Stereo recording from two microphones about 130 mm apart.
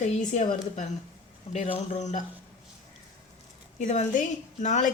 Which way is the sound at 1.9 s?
65° left (ahead or behind).